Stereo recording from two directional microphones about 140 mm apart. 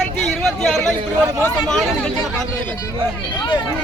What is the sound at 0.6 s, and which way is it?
Speech, 5° left (ahead or behind).